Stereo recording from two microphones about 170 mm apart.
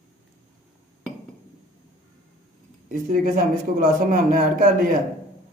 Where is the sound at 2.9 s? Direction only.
50° right (ahead or behind).